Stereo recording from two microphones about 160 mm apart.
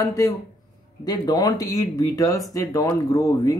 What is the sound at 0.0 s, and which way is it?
Speech, 20° left (ahead or behind).